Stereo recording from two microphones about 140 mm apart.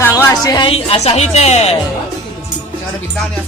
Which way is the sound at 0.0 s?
15° left (ahead or behind).